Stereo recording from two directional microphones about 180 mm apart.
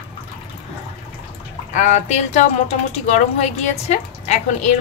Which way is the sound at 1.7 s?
40° left (ahead or behind).